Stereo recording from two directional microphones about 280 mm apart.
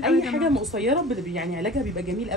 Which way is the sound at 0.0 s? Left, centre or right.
Centre.